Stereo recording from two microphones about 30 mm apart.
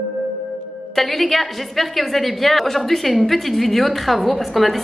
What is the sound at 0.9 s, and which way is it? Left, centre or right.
A woman's voice, centre.